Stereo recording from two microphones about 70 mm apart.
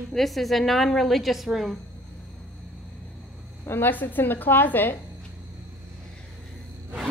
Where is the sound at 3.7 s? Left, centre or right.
Left.